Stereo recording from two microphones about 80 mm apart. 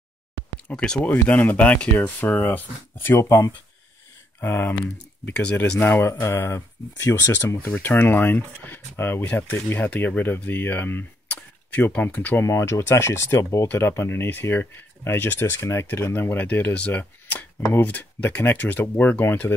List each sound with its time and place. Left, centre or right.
0.7 s speech: centre; by 3.3 s left
4.4 s speech: left
5.3 s speech: centre
6.0 s speech: left
12.4 s speech: left